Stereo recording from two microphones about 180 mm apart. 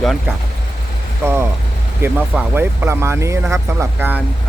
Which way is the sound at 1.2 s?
15° right (ahead or behind).